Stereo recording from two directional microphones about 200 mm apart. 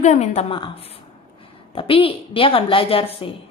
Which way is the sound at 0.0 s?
35° left (ahead or behind).